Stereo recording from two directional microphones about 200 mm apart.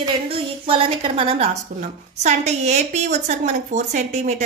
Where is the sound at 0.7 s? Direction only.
25° right (ahead or behind).